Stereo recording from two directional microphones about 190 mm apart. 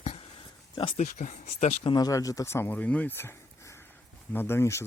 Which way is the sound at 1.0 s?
40° left (ahead or behind).